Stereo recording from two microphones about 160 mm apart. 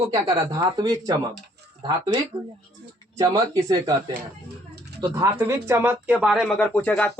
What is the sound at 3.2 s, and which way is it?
Speech, 20° right (ahead or behind).